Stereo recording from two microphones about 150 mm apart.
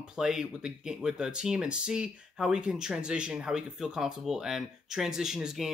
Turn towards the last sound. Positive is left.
turn(degrees=-5)  # may be behind; listen again after turning